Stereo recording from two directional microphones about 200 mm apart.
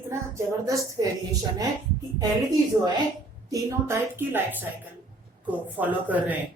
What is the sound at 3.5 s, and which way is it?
Speech, 15° right (ahead or behind).